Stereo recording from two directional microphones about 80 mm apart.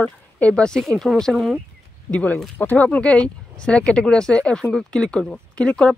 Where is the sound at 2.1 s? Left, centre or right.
Centre.